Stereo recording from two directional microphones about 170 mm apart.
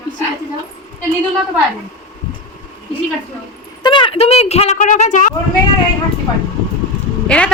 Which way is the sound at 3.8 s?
30° left (ahead or behind).